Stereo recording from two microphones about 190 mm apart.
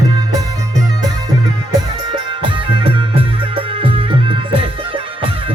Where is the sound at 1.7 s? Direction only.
25° right (ahead or behind).